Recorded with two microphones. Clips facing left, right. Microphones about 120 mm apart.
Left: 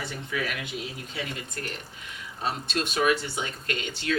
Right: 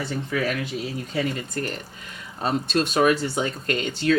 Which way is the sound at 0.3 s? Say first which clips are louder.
Right 5 dB; 40° right (ahead or behind).